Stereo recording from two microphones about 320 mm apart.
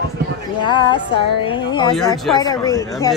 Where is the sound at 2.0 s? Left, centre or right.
Centre.